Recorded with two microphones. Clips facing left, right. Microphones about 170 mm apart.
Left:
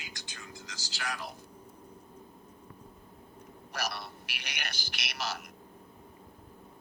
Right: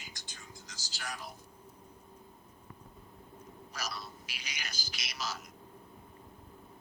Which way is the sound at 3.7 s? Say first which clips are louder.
Left 5 dB; 65° left (ahead or behind).